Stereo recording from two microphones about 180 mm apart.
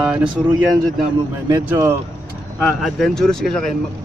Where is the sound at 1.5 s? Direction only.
15° right (ahead or behind).